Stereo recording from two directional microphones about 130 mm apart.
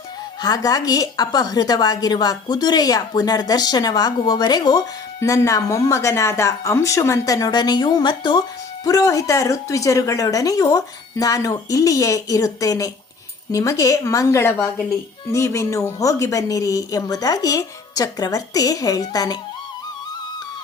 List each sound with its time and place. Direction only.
0.4 s a woman's voice: 30° left (ahead or behind)